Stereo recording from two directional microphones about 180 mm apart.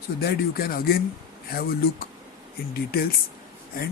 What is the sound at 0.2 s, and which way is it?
Speech, 55° left (ahead or behind).